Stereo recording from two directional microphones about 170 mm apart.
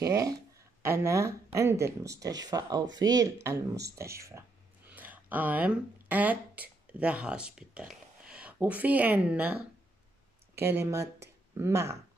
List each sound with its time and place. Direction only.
0.0 s speech: 20° right (ahead or behind)
10.6 s speech: 15° right (ahead or behind)